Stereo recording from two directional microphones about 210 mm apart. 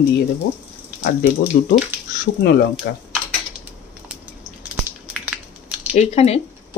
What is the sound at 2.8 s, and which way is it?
Speech, 50° left (ahead or behind).